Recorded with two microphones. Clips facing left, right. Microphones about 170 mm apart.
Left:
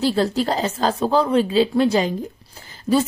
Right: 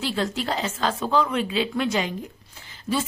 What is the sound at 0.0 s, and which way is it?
A woman's voice, 35° left (ahead or behind).